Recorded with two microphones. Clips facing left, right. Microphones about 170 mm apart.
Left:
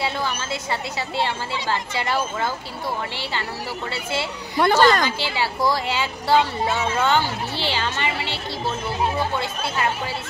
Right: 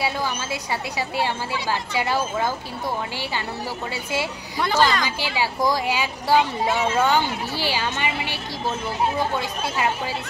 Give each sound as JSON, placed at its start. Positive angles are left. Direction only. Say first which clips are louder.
{"t": 0.0, "sound": "a woman's voice", "louder": "even", "side_deg": -10}
{"t": 3.9, "sound": "a woman's voice", "louder": "even", "side_deg": -15}
{"t": 4.6, "sound": "speech", "louder": "left 3 dB", "side_deg": 55}
{"t": 5.0, "sound": "a woman's voice", "louder": "left 1 dB", "side_deg": -15}
{"t": 9.4, "sound": "a woman's voice", "louder": "even", "side_deg": -15}